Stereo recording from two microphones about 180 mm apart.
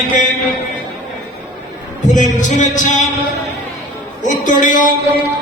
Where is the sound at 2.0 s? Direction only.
45° left (ahead or behind).